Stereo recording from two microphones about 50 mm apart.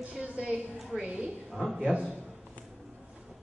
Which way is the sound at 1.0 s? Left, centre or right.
Right.